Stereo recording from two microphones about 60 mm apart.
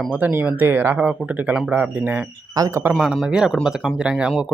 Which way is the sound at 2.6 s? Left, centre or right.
Right.